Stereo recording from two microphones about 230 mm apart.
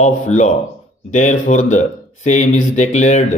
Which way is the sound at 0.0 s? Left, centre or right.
Left.